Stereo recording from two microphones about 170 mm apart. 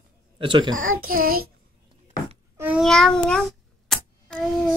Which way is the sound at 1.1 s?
60° right (ahead or behind).